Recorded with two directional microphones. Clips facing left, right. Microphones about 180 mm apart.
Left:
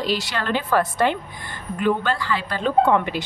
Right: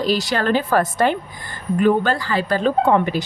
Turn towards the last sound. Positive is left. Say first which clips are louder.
# right 1 dB
turn(degrees=-40)  # may be behind; listen again after turning